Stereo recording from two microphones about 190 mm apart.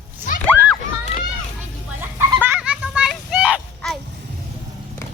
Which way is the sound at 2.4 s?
10° right (ahead or behind).